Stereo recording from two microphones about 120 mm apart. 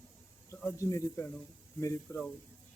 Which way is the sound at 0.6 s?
25° left (ahead or behind).